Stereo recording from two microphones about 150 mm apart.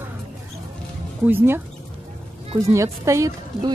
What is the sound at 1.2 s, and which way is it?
Speech, 15° right (ahead or behind).